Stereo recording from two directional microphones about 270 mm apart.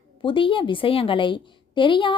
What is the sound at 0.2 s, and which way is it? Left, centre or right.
A woman's voice, centre.